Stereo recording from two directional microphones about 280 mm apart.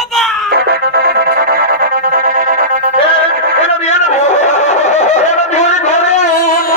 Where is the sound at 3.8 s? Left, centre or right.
Left.